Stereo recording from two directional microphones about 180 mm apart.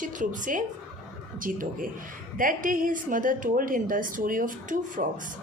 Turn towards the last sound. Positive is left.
turn(degrees=-45)  # may be behind; listen again after turning